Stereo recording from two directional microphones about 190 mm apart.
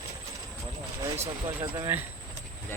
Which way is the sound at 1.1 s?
35° right (ahead or behind).